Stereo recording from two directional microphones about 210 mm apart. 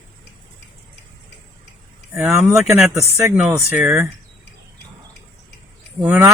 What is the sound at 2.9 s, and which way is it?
Speech, 15° right (ahead or behind).